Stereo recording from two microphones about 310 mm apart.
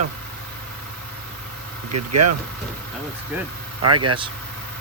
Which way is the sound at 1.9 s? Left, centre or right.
Right.